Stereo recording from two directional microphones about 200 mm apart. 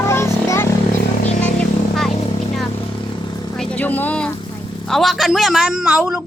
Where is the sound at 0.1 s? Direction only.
15° left (ahead or behind).